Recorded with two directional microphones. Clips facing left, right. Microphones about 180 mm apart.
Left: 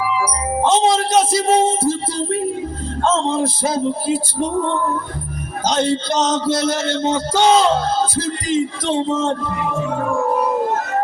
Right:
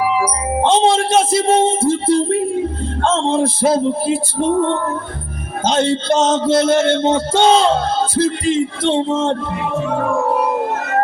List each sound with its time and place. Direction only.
0.6 s speech: 30° right (ahead or behind)
5.6 s speech: 25° right (ahead or behind)